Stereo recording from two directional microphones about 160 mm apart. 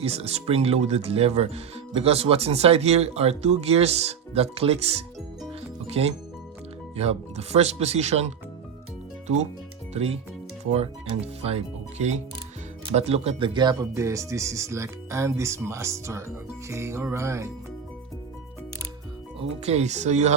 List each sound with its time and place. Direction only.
0.0 s speech: 40° right (ahead or behind)
5.5 s music: 40° right (ahead or behind)
6.9 s speech: 40° right (ahead or behind)
9.9 s speech: 40° right (ahead or behind); by 17.5 s 15° right (ahead or behind)
19.4 s speech: 40° right (ahead or behind)